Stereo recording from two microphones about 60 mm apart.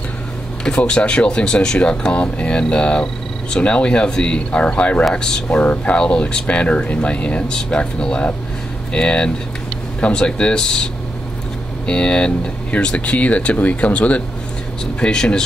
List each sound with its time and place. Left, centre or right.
0.7 s speech: centre